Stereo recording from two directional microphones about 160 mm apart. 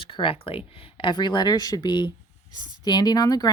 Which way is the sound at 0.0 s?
30° left (ahead or behind).